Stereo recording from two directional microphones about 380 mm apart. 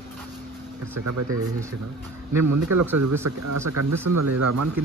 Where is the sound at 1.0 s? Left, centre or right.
Right.